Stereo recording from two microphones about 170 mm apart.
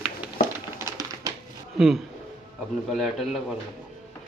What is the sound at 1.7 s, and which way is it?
A man's voice, centre (ahead or behind).